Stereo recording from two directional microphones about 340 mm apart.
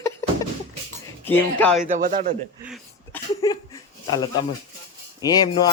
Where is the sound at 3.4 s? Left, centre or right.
Centre.